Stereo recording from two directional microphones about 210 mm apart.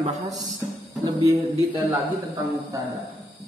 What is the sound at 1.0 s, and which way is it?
A man's voice, 15° right (ahead or behind).